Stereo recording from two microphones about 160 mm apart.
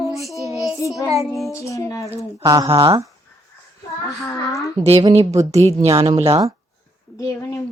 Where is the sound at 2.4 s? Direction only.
25° right (ahead or behind).